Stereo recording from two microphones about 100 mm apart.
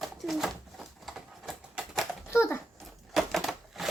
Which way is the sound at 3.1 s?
Centre (ahead or behind).